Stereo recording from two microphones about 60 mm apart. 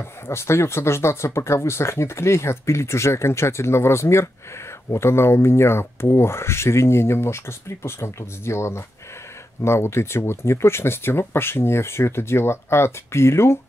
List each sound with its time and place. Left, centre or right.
0.3 s speech: left